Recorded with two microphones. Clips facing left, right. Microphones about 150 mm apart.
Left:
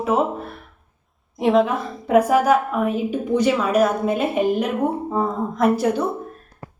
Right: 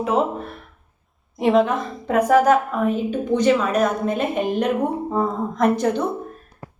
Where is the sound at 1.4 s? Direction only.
Centre (ahead or behind).